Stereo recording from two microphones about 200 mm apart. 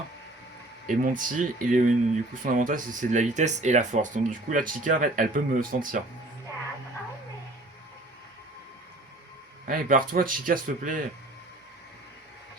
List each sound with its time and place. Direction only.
0.9 s speech: 40° right (ahead or behind)
9.6 s speech: 45° right (ahead or behind)